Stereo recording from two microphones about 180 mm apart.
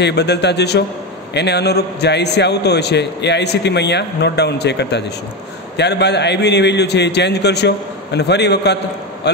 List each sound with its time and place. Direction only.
0.0 s a man's voice: 70° left (ahead or behind)